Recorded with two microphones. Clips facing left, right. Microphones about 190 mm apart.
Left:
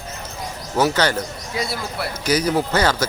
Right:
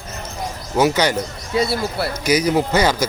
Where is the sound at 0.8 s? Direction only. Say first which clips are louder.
Right 2 dB; 10° right (ahead or behind).